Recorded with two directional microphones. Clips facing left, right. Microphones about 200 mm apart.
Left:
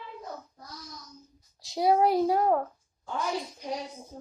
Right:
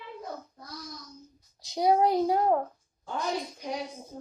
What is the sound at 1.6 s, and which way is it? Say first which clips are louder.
A woman's voice: even; 20° right (ahead or behind).